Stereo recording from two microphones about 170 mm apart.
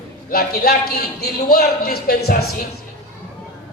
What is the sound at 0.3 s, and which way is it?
A man's voice, 60° left (ahead or behind).